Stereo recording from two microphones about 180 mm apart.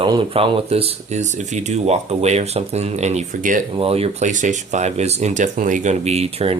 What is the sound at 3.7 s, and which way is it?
Speech, 30° right (ahead or behind).